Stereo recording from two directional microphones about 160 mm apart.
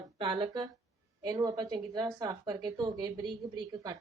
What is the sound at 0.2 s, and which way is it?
A woman's voice, 30° right (ahead or behind).